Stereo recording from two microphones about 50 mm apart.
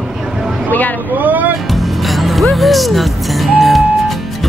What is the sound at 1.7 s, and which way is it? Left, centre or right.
Music, centre.